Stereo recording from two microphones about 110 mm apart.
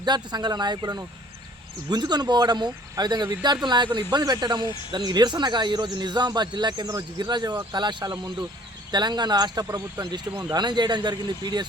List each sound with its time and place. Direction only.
0.0 s speech: 40° right (ahead or behind)